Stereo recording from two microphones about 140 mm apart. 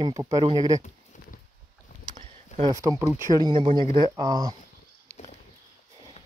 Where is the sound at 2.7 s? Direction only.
20° right (ahead or behind).